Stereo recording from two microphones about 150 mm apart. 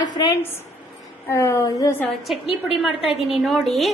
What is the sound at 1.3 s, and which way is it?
Speech, 15° left (ahead or behind).